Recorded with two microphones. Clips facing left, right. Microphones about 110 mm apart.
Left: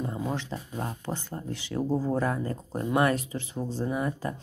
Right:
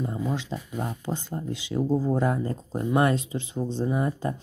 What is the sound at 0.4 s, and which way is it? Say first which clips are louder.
Speech: right 2 dB; 20° right (ahead or behind).